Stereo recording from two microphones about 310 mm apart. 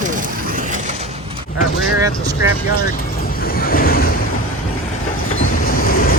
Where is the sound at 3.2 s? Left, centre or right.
Left.